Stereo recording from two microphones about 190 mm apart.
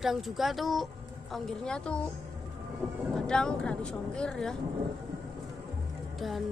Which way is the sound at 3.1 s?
5° left (ahead or behind).